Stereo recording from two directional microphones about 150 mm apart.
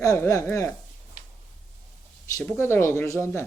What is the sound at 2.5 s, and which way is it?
Speech, 15° left (ahead or behind).